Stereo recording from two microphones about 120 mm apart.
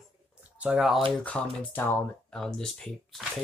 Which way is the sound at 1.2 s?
10° left (ahead or behind).